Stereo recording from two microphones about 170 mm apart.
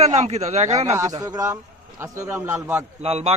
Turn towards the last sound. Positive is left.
turn(degrees=-35)  # may be behind; listen again after turning